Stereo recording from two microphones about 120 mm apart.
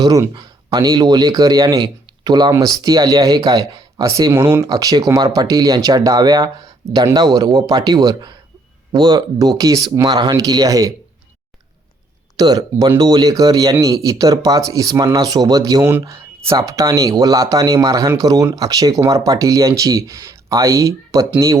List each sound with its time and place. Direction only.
0.0 s speech: 35° right (ahead or behind)
4.7 s speech: 35° right (ahead or behind)
12.4 s speech: 30° right (ahead or behind)
15.8 s speech: 15° right (ahead or behind)